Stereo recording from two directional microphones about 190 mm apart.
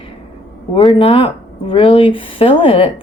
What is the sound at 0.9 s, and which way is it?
Speech, 30° left (ahead or behind).